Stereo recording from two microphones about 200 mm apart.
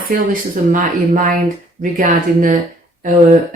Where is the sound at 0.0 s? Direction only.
45° right (ahead or behind).